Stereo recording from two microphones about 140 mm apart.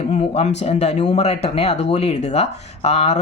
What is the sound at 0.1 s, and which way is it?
Speech, 50° left (ahead or behind).